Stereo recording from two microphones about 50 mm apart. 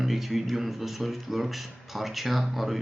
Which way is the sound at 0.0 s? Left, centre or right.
Centre.